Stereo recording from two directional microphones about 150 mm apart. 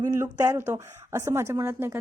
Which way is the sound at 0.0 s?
20° right (ahead or behind).